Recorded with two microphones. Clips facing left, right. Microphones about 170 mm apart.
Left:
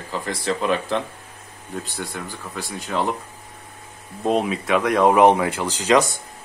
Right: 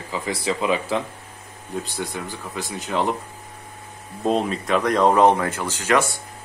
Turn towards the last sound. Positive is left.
turn(degrees=15)  # may be behind; listen again after turning